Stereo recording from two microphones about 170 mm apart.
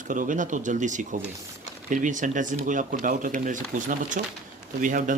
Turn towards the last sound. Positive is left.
turn(degrees=-50)  # may be behind; listen again after turning